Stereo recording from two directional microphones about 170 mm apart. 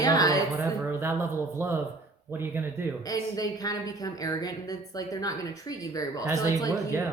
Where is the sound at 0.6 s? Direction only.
15° right (ahead or behind).